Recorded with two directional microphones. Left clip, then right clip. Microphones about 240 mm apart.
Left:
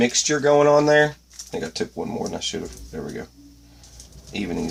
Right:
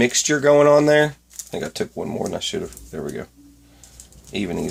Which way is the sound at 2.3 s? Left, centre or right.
Right.